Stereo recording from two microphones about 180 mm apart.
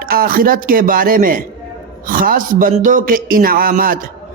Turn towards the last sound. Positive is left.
turn(degrees=-55)  # may be behind; listen again after turning